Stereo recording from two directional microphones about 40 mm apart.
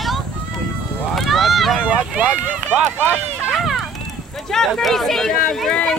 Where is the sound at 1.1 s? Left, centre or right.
Centre.